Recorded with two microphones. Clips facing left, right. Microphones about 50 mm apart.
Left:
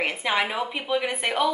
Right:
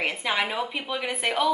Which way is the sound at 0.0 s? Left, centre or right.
Centre.